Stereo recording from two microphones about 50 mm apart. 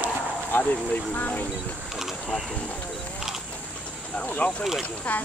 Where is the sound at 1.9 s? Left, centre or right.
Centre.